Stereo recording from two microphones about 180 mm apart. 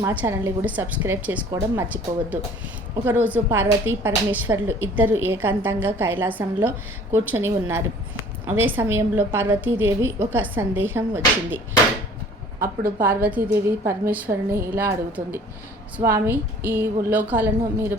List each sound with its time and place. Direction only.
0.0 s a woman's voice: 10° right (ahead or behind)
12.5 s speech: 55° right (ahead or behind)
13.1 s a woman's voice: 10° right (ahead or behind)